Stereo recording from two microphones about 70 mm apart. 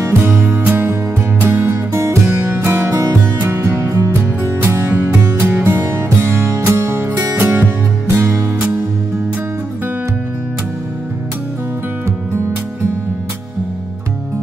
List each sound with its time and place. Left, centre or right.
0.3 s music: right
8.1 s music: right